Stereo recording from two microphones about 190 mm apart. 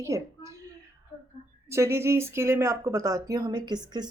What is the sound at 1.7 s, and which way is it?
Speech, 15° right (ahead or behind).